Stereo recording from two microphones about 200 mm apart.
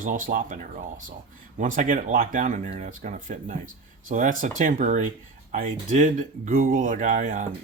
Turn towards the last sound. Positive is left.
turn(degrees=-40)  # may be behind; listen again after turning